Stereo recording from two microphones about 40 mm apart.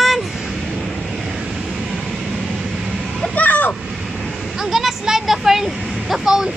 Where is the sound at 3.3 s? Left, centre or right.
Left.